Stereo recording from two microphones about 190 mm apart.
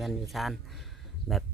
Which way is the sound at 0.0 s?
Centre (ahead or behind).